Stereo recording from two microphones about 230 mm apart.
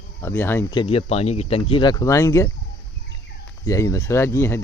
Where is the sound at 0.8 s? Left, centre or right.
Left.